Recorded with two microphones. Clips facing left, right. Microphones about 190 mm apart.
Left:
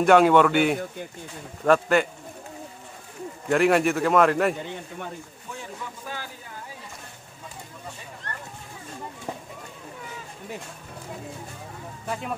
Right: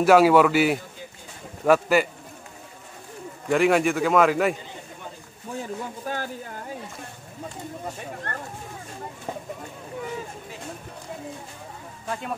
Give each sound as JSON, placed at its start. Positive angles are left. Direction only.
{"t": 0.0, "sound": "a man's voice", "side_deg": -5}
{"t": 3.4, "sound": "a man's voice", "side_deg": 0}
{"t": 5.6, "sound": "speech", "side_deg": -50}
{"t": 8.0, "sound": "a sound", "side_deg": -55}